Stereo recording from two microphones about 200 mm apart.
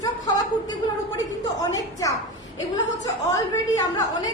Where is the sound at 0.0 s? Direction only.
20° left (ahead or behind).